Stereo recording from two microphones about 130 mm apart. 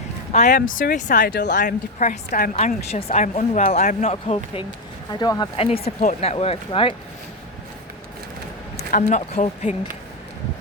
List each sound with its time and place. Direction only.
0.3 s speech: 80° left; by 4.6 s 55° left (ahead or behind)
5.2 s speech: 30° left (ahead or behind)
5.5 s speech: 50° left (ahead or behind)
8.9 s speech: 75° left (ahead or behind)